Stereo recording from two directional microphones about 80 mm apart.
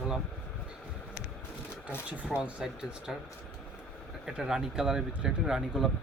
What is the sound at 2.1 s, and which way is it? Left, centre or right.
Speech, centre.